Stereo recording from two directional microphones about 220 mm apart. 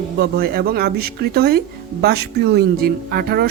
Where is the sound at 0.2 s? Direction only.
45° right (ahead or behind).